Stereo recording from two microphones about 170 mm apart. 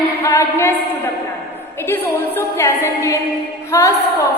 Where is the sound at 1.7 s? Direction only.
15° left (ahead or behind).